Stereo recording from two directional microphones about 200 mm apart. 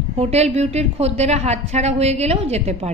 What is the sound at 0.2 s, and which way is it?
A man's voice, 35° right (ahead or behind).